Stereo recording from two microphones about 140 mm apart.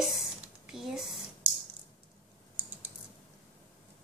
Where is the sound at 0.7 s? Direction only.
5° right (ahead or behind).